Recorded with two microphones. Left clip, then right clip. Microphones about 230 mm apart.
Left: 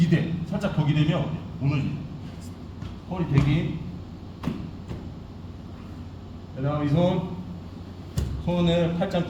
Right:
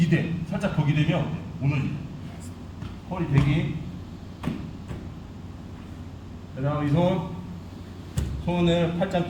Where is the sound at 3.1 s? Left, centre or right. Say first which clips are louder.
Even; centre.